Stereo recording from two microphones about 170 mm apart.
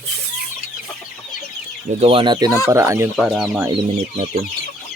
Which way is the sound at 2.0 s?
30° right (ahead or behind).